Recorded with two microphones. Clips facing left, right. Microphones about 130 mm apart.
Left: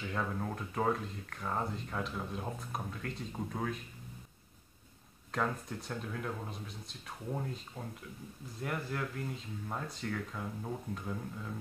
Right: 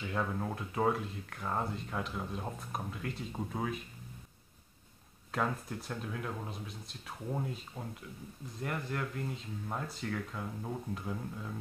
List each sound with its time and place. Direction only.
0.0 s speech: 5° right (ahead or behind)
5.3 s speech: 5° right (ahead or behind)